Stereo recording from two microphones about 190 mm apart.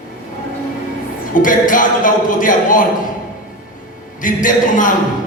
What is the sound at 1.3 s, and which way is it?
A man's voice, 45° left (ahead or behind).